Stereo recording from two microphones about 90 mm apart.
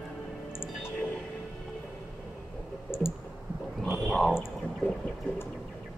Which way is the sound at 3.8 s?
5° left (ahead or behind).